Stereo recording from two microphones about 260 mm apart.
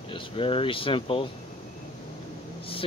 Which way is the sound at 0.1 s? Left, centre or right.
Left.